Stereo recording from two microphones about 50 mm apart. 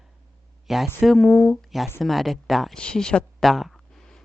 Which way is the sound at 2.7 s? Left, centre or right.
Centre.